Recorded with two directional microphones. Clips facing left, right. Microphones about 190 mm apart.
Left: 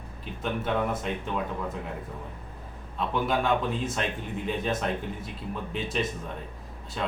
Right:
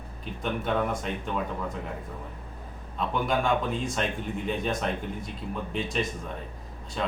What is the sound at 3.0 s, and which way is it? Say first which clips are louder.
Speech: even; centre (ahead or behind).